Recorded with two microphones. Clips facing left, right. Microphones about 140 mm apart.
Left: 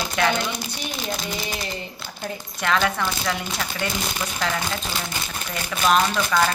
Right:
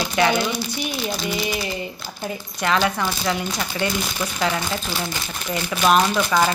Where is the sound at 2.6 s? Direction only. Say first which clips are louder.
Right 2 dB; 5° right (ahead or behind).